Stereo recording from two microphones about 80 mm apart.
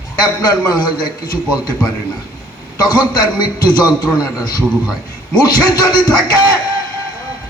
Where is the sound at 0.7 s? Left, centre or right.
Left.